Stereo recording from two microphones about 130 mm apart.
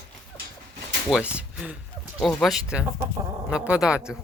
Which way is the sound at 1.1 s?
10° right (ahead or behind).